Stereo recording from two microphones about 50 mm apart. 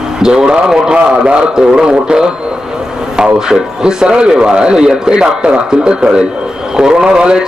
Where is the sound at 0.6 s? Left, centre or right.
Centre.